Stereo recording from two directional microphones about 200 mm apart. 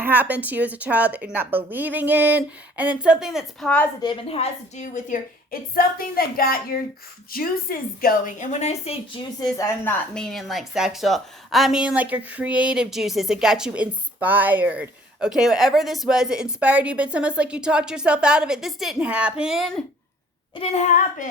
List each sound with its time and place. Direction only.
0.0 s a woman's voice: 10° right (ahead or behind)
4.0 s a woman's voice: 25° left (ahead or behind)
9.6 s a woman's voice: 10° left (ahead or behind)
20.6 s a woman's voice: 35° left (ahead or behind)